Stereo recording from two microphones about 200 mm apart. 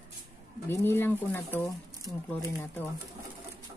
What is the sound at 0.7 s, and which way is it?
Speech, 10° left (ahead or behind).